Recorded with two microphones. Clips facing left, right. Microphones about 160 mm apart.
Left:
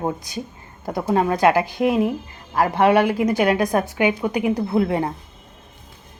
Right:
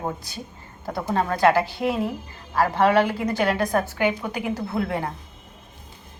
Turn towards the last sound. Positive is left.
turn(degrees=20)  # may be behind; listen again after turning